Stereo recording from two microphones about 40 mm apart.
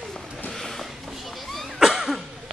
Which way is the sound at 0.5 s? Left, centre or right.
Centre.